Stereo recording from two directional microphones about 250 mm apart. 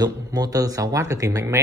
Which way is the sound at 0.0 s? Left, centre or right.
Centre.